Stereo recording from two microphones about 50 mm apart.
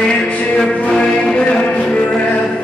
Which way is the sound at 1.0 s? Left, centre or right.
Centre.